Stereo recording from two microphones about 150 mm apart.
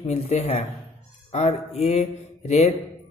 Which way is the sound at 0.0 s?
45° left (ahead or behind).